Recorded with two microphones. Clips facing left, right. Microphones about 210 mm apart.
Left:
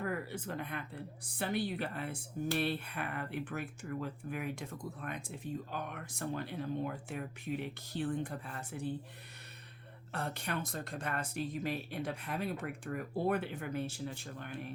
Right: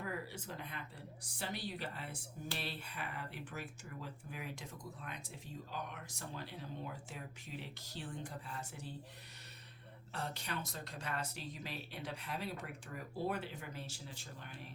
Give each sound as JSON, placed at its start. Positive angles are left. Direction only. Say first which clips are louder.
{"t": 0.0, "sound": "speech", "louder": "left 6 dB", "side_deg": 55}
{"t": 10.1, "sound": "speech", "louder": "left 5 dB", "side_deg": 55}